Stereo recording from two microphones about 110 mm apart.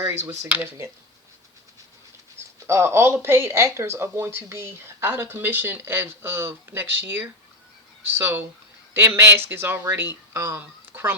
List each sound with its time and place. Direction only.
0.5 s speech: 15° right (ahead or behind)
2.6 s speech: 25° right (ahead or behind)
10.6 s a sound: 20° right (ahead or behind)